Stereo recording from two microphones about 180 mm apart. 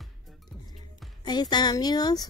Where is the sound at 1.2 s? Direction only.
25° left (ahead or behind).